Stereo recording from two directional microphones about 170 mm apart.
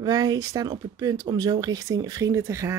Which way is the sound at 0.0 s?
25° right (ahead or behind).